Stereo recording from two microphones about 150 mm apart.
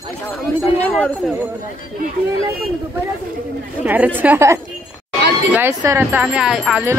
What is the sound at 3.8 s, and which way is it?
Speech, 10° right (ahead or behind).